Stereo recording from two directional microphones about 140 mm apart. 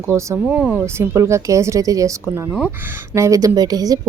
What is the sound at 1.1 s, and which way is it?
A woman's voice, 20° right (ahead or behind).